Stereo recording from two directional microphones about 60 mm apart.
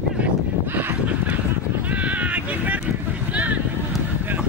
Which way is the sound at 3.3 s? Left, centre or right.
Right.